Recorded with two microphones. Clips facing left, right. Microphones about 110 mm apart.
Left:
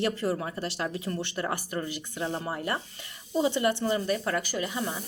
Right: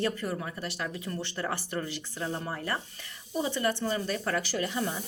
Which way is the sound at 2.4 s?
20° left (ahead or behind).